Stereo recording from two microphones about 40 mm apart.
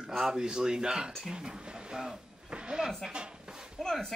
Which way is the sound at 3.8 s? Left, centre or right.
Centre.